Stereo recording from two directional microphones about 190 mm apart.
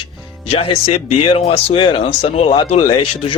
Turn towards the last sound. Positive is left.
turn(degrees=25)  # may be behind; listen again after turning